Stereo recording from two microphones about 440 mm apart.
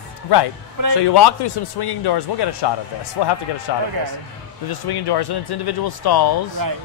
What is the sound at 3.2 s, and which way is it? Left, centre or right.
Speech, left.